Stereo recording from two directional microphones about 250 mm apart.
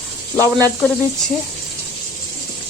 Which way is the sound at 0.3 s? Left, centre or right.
Centre.